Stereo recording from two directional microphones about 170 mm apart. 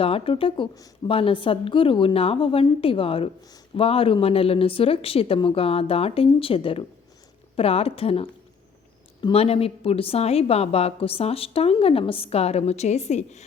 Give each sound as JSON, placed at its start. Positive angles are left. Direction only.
{"t": 0.0, "sound": "a woman's voice", "side_deg": 35}